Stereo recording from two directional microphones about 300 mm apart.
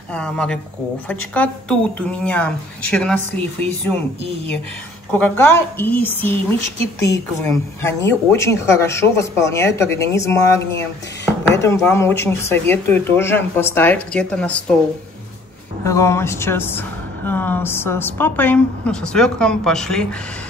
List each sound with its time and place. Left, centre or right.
0.1 s speech: centre
5.1 s speech: centre
15.8 s speech: centre